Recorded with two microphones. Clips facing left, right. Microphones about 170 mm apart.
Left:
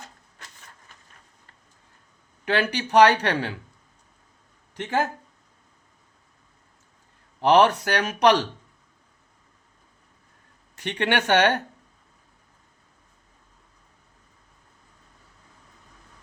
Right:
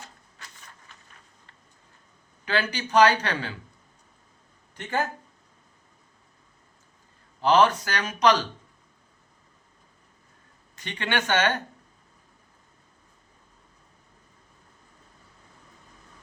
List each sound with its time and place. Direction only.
2.4 s speech: 70° left (ahead or behind)
4.7 s speech: 90° left
7.4 s speech: 75° left (ahead or behind)
10.8 s speech: 70° left (ahead or behind)